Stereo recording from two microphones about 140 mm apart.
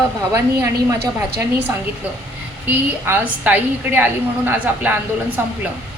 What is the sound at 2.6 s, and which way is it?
A woman's voice, 10° right (ahead or behind).